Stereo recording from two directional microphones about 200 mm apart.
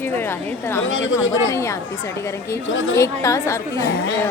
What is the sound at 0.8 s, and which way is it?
Speech, 75° left (ahead or behind).